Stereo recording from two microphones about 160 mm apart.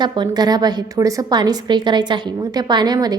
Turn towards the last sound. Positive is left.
turn(degrees=-25)  # may be behind; listen again after turning